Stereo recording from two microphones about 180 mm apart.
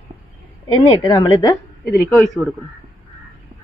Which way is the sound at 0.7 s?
20° left (ahead or behind).